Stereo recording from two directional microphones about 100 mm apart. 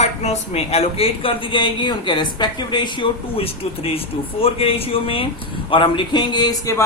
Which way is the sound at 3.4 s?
75° left (ahead or behind).